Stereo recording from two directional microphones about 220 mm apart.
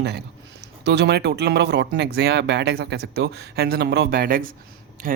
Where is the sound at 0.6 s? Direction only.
50° right (ahead or behind).